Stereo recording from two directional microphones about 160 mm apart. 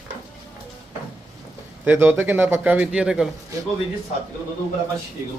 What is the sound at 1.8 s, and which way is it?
Speech, 10° right (ahead or behind).